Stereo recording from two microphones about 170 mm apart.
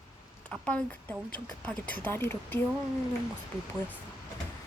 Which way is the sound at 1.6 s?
10° left (ahead or behind).